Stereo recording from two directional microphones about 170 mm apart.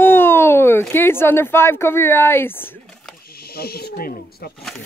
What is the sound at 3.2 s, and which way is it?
Snake, 65° left (ahead or behind).